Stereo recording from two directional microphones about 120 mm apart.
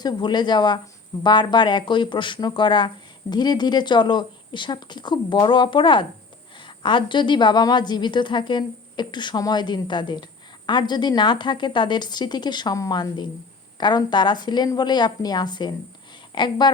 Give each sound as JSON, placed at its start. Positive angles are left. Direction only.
{"t": 0.0, "sound": "speech", "side_deg": 35}